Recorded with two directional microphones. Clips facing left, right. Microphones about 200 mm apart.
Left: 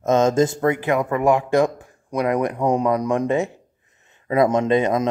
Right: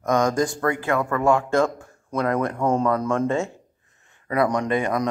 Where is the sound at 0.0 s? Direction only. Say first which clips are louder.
Left 4 dB; 25° left (ahead or behind).